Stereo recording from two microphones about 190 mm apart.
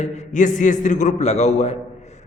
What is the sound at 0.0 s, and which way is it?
A man's voice, 40° left (ahead or behind).